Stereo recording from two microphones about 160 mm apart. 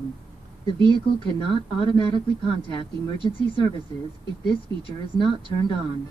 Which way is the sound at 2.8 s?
30° left (ahead or behind).